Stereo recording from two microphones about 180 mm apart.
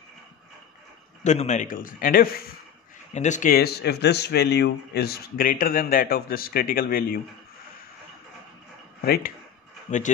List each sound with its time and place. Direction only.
1.2 s a man's voice: 40° left (ahead or behind)
3.1 s speech: 40° left (ahead or behind)
9.0 s speech: 55° left (ahead or behind)
9.8 s speech: 45° left (ahead or behind)